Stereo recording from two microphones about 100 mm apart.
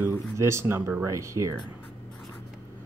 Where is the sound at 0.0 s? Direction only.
30° right (ahead or behind).